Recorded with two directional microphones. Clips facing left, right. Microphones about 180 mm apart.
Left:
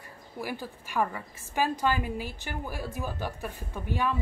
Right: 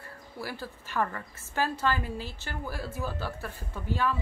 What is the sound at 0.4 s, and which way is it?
A woman's voice, 15° left (ahead or behind).